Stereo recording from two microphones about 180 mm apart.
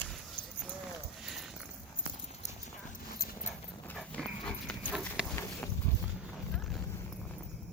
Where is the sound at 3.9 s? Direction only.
5° left (ahead or behind).